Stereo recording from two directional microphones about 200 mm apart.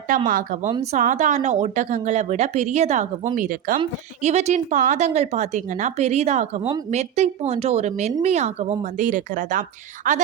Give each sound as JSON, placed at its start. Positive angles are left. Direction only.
{"t": 0.3, "sound": "speech", "side_deg": -40}